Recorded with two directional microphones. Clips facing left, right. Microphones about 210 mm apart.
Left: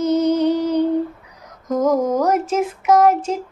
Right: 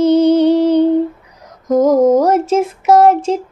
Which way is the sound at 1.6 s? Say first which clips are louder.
Right 7 dB; 30° right (ahead or behind).